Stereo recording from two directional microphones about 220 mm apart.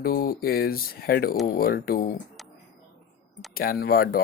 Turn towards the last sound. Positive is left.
turn(degrees=40)  # may be behind; listen again after turning